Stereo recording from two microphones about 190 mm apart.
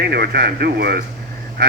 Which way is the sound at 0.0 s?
55° right (ahead or behind).